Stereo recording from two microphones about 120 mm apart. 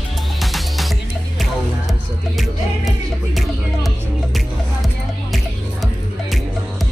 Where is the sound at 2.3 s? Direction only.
Centre (ahead or behind).